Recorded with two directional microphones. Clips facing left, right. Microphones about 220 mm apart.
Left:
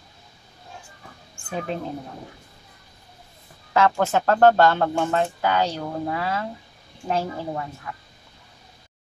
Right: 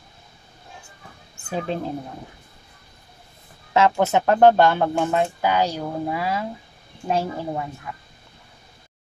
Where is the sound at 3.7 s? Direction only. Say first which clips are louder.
Right 2 dB; 20° right (ahead or behind).